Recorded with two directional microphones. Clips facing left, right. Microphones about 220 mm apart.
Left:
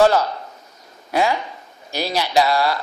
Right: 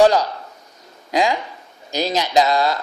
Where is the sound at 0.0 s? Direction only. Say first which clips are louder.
Right 1 dB; 15° right (ahead or behind).